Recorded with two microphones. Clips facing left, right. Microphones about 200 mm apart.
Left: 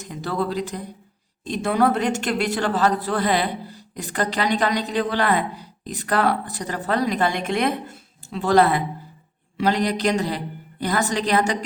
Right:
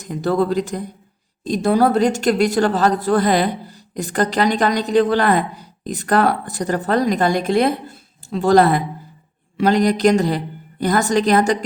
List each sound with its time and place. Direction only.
0.0 s a woman's voice: 45° right (ahead or behind)